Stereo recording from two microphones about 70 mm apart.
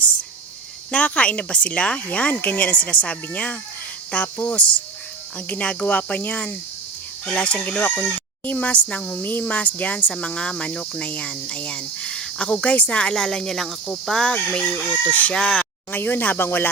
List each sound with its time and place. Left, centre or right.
0.9 s speech: centre
7.8 s speech: centre
14.3 s speech: centre
15.4 s speech: centre
15.9 s speech: left